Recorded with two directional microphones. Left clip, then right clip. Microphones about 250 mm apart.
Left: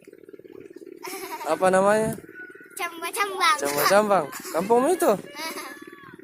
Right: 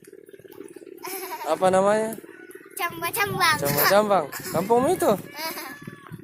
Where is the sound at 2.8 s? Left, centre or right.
Centre.